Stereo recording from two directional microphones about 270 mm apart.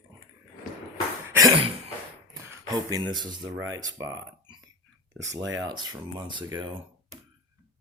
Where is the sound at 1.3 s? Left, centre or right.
Centre.